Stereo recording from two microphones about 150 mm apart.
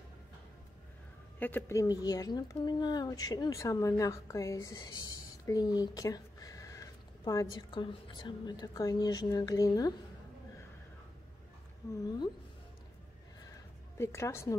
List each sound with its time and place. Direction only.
1.4 s speech: 15° left (ahead or behind)
11.8 s speech: 20° left (ahead or behind)
13.9 s speech: 20° left (ahead or behind)